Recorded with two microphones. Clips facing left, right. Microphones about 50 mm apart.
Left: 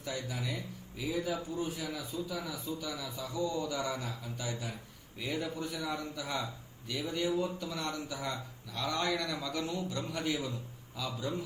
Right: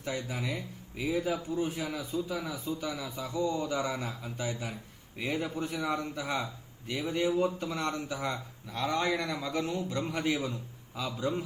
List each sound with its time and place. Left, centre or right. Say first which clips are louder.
0.0 s a man's voice: right 3 dB; right